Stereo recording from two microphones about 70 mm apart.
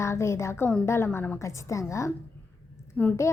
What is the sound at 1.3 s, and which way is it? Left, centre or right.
Speech, left.